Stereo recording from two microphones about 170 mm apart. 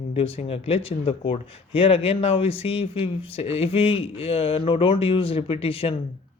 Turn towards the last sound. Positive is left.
turn(degrees=35)  # may be behind; listen again after turning